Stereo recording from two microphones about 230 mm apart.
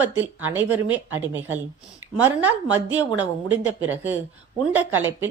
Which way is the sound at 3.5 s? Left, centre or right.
Right.